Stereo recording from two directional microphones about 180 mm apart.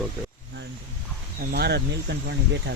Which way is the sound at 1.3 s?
65° right (ahead or behind).